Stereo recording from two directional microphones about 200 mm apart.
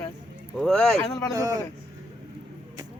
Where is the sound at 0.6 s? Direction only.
Centre (ahead or behind).